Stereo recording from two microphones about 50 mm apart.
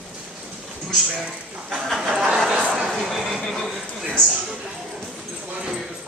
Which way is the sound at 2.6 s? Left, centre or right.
Right.